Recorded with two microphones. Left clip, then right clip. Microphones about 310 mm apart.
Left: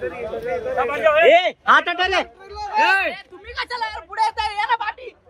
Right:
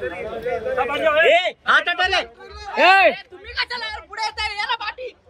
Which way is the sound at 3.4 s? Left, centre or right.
Centre.